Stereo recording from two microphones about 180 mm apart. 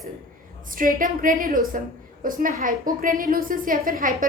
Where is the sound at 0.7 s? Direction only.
50° right (ahead or behind).